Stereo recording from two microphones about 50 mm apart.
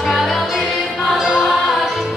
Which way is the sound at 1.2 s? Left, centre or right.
Centre.